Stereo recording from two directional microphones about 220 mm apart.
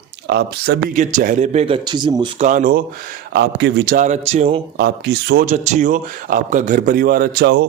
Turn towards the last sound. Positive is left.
turn(degrees=-45)  # may be behind; listen again after turning